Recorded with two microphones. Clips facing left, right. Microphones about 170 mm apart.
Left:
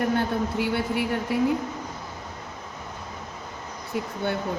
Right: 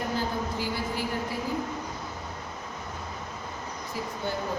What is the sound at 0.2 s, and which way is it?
Speech, 65° left (ahead or behind).